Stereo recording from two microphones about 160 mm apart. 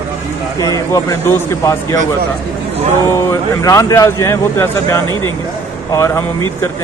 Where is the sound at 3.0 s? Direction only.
20° left (ahead or behind).